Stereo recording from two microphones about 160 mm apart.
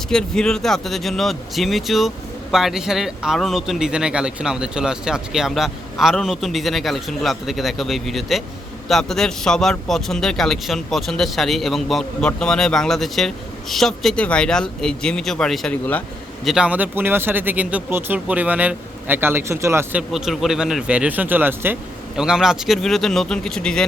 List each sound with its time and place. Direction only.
0.1 s speech: 5° left (ahead or behind)
16.5 s speech: 5° right (ahead or behind)
20.0 s speech: 5° right (ahead or behind)